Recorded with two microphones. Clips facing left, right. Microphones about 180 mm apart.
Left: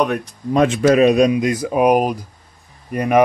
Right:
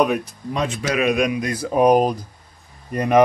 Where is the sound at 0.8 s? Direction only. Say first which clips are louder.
Left 7 dB; 35° left (ahead or behind).